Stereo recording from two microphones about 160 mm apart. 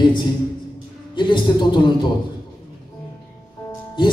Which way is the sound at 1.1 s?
30° left (ahead or behind).